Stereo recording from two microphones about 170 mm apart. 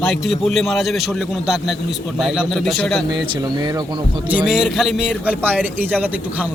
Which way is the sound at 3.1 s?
25° right (ahead or behind).